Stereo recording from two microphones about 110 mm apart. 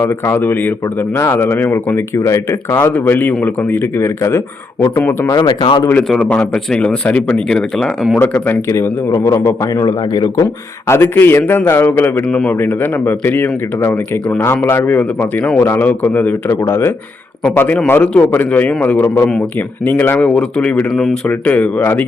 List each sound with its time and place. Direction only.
0.0 s a man's voice: 20° left (ahead or behind)
5.3 s speech: 40° left (ahead or behind)
6.1 s speech: 5° left (ahead or behind)
8.2 s a man's voice: 15° left (ahead or behind)
9.8 s a man's voice: 35° left (ahead or behind)
10.4 s a man's voice: 25° left (ahead or behind)